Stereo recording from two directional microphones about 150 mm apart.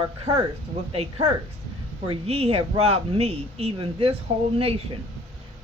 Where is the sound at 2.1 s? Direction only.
40° right (ahead or behind).